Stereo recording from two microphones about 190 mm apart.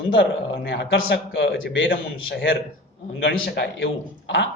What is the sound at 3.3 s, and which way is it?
Speech, 60° left (ahead or behind).